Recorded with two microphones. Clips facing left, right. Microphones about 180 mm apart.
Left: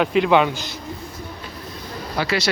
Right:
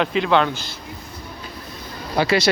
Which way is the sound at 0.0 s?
5° left (ahead or behind).